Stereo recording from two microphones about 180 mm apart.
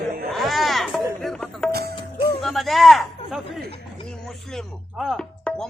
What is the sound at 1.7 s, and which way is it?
Music, 60° right (ahead or behind).